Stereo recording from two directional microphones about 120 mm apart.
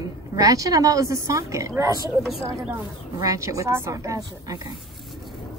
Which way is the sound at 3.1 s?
25° right (ahead or behind).